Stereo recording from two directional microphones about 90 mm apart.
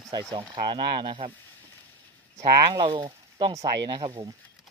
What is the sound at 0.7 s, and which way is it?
Speech, 70° right (ahead or behind).